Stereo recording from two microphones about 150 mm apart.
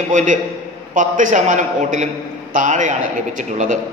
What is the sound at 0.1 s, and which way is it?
A man's voice, 55° right (ahead or behind).